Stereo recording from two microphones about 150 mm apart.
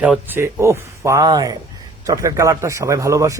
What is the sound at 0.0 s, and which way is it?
A man's voice, 10° right (ahead or behind).